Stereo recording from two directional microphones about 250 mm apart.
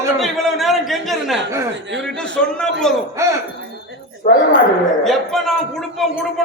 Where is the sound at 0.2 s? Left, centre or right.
Centre.